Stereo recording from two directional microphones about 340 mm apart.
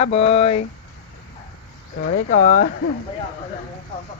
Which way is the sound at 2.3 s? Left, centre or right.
Left.